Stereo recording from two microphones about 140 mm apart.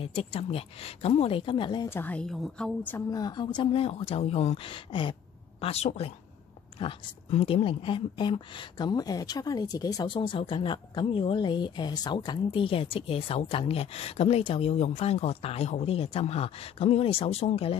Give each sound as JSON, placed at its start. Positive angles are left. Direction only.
{"t": 0.0, "sound": "speech", "side_deg": 40}
{"t": 1.9, "sound": "a woman's voice", "side_deg": 15}
{"t": 3.1, "sound": "a woman's voice", "side_deg": 30}
{"t": 5.6, "sound": "a woman's voice", "side_deg": 50}